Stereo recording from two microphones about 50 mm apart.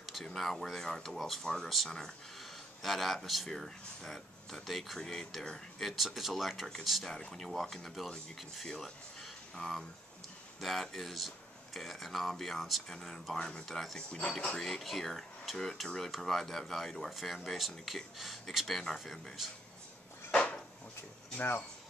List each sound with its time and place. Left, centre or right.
0.2 s speech: centre
7.2 s speech: centre
13.7 s speech: centre
13.9 s speech: left
14.6 s speech: centre
20.2 s a sound: centre